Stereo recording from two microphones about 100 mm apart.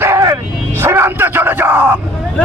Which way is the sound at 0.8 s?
25° right (ahead or behind).